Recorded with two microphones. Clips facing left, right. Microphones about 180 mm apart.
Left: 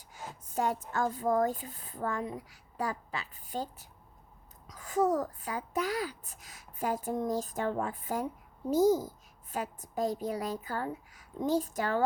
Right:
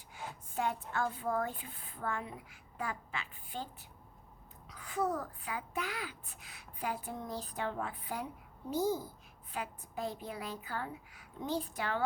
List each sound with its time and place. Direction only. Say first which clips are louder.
0.1 s a child's voice: left 3 dB; 40° left (ahead or behind)